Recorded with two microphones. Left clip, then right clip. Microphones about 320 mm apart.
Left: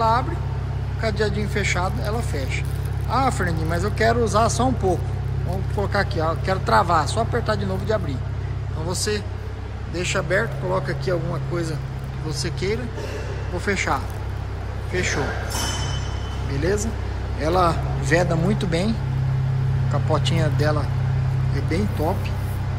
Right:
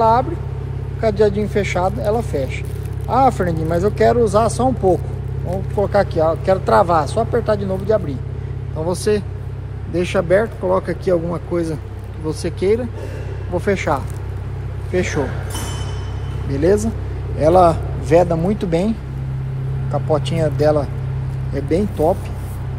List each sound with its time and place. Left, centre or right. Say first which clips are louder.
0.0 s vehicle: right 6 dB; centre
1.0 s a man's voice: right 8 dB; centre
16.5 s speech: right 8 dB; centre